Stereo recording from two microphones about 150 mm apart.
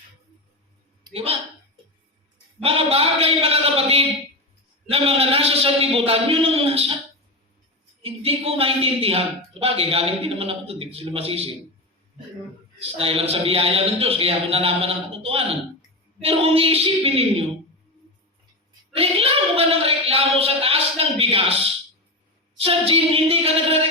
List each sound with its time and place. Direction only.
1.1 s speech: 40° right (ahead or behind)
2.6 s speech: 40° right (ahead or behind)
8.0 s speech: 40° right (ahead or behind)
12.8 s speech: 40° right (ahead or behind)
18.9 s speech: 40° right (ahead or behind)